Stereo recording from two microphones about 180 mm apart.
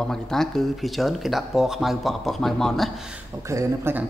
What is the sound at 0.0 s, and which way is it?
Speech, 5° left (ahead or behind).